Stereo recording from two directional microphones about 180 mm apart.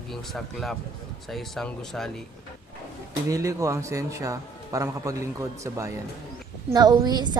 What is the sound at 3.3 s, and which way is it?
A man's voice, 20° right (ahead or behind).